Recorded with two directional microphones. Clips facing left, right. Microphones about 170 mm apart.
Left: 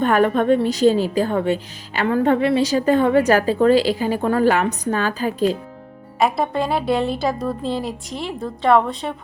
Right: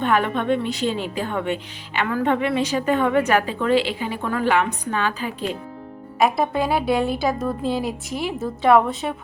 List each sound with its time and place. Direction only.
0.0 s a woman's voice: 40° left (ahead or behind)
6.1 s a woman's voice: centre (ahead or behind)